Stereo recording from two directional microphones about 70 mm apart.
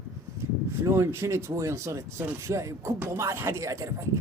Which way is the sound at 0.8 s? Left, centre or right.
Right.